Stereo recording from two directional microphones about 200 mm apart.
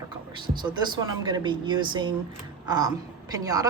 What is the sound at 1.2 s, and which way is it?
Speech, 25° right (ahead or behind).